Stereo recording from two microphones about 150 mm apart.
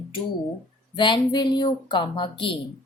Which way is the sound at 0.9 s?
30° left (ahead or behind).